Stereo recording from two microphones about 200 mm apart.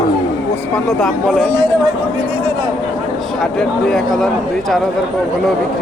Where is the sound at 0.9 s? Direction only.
Centre (ahead or behind).